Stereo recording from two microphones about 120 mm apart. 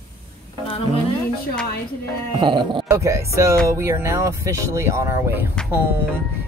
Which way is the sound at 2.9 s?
25° right (ahead or behind).